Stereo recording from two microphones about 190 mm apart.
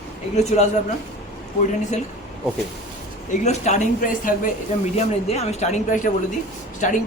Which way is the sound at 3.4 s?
35° left (ahead or behind).